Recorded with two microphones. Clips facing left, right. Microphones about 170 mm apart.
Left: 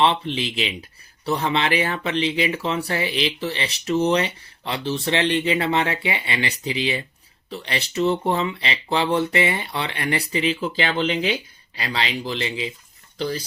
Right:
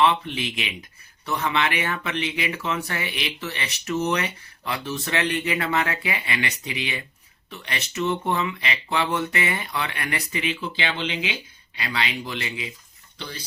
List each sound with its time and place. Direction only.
0.0 s speech: 30° left (ahead or behind)